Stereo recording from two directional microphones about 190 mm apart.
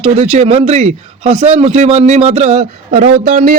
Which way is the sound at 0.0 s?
30° right (ahead or behind).